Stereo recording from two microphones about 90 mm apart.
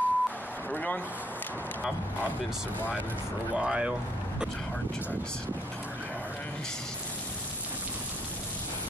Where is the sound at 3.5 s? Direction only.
10° right (ahead or behind).